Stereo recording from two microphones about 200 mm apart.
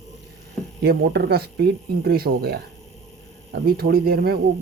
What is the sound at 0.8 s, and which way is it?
Speech, 55° right (ahead or behind).